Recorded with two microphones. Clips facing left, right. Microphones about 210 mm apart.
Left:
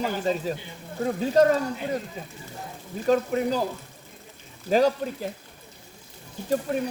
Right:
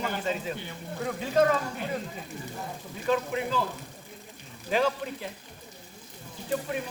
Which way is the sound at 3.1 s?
40° left (ahead or behind).